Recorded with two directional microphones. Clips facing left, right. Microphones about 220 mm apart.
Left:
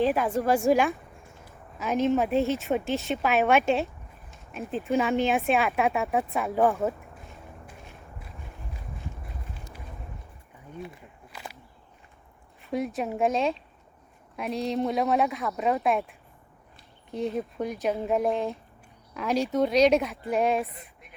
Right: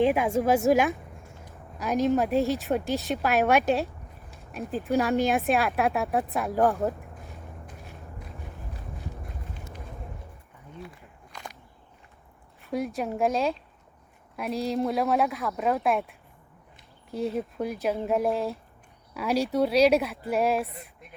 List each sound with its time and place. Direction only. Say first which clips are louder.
0.0 s a woman's voice: right 2 dB; 10° right (ahead or behind)
9.2 s run: right 2 dB; centre (ahead or behind)
11.3 s a sound: even; 5° left (ahead or behind)
12.6 s speech: even; centre (ahead or behind)